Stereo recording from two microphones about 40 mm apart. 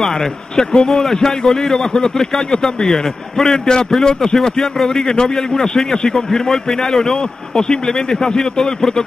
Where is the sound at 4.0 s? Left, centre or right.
Centre.